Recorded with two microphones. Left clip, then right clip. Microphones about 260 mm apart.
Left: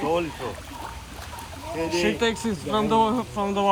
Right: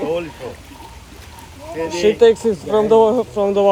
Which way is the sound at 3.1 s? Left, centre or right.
Right.